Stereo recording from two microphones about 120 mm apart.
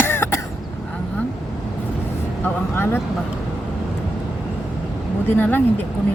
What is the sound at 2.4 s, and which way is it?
Speech, 20° left (ahead or behind).